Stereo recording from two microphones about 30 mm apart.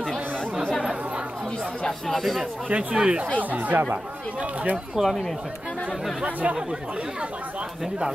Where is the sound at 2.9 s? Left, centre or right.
Right.